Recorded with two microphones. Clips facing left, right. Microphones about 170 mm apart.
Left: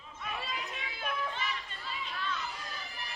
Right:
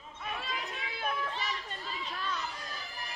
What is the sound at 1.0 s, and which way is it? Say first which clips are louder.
Children playing: right 1 dB; 35° right (ahead or behind).